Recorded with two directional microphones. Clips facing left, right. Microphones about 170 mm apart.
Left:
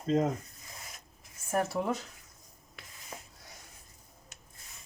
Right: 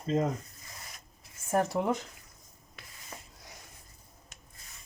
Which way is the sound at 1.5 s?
20° right (ahead or behind).